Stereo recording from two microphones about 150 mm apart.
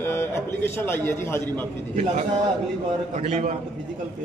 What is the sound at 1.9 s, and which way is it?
A man's voice, 50° right (ahead or behind).